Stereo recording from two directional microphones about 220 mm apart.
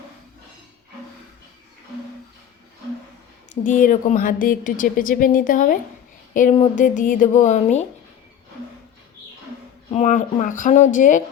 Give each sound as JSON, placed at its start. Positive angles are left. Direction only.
{"t": 3.5, "sound": "a woman's voice", "side_deg": 35}
{"t": 9.9, "sound": "a woman's voice", "side_deg": 35}